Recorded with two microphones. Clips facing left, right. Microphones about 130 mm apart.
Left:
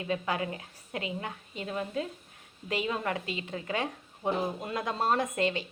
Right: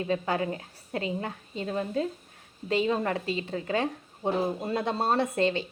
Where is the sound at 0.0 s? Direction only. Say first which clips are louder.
Right 4 dB; 35° right (ahead or behind).